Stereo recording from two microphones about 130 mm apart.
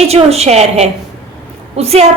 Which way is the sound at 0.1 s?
50° right (ahead or behind).